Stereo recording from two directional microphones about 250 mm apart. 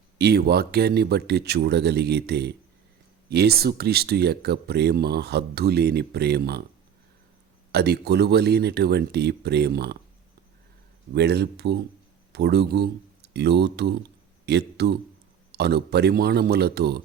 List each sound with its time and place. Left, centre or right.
0.2 s speech: right
7.7 s speech: right
11.1 s speech: right